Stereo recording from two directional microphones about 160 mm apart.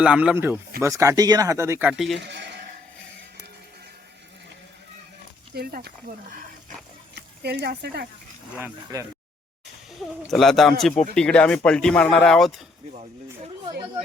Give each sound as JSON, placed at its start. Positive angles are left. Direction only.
{"t": 0.0, "sound": "speech", "side_deg": -5}
{"t": 1.9, "sound": "speech", "side_deg": 0}
{"t": 2.1, "sound": "a man's voice", "side_deg": -90}
{"t": 5.5, "sound": "speech", "side_deg": -70}
{"t": 7.2, "sound": "speech", "side_deg": -90}
{"t": 8.6, "sound": "speech", "side_deg": -20}
{"t": 10.2, "sound": "speech", "side_deg": 0}